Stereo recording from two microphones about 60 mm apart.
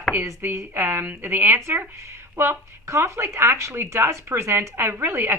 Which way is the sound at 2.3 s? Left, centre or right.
Right.